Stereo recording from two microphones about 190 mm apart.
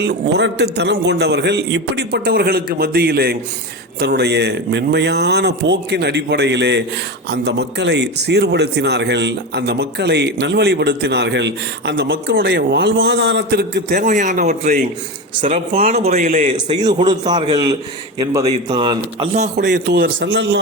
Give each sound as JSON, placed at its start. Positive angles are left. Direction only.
{"t": 0.0, "sound": "a man's voice", "side_deg": -65}
{"t": 14.0, "sound": "speech", "side_deg": -40}
{"t": 16.6, "sound": "speech", "side_deg": -20}
{"t": 19.5, "sound": "a man's voice", "side_deg": -65}